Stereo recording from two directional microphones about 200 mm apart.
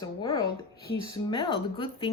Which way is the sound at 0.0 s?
20° left (ahead or behind).